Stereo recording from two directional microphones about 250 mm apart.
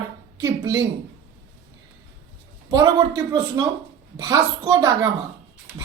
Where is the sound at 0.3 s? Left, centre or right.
Centre.